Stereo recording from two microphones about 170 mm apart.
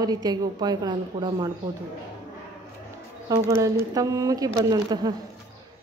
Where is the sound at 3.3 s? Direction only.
20° right (ahead or behind).